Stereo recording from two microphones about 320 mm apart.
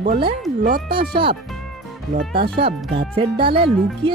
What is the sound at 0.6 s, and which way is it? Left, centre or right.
Speech, right.